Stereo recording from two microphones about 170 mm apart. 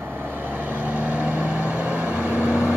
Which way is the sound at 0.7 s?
10° right (ahead or behind).